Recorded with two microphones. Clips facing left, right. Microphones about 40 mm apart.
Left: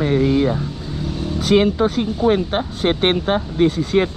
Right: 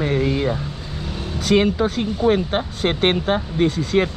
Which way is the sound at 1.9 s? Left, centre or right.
Centre.